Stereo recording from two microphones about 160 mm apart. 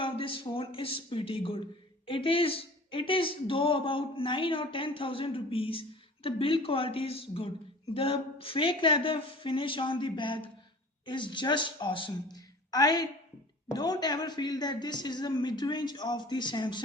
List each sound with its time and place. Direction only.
0.0 s a woman's voice: 30° left (ahead or behind)